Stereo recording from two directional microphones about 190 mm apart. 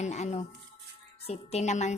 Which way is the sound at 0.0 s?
35° left (ahead or behind).